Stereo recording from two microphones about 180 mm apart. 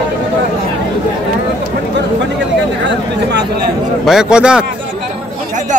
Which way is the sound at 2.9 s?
70° right (ahead or behind).